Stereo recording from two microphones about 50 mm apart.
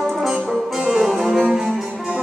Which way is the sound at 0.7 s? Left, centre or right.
Right.